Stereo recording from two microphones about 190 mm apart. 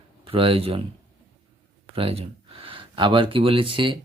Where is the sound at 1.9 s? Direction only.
30° right (ahead or behind).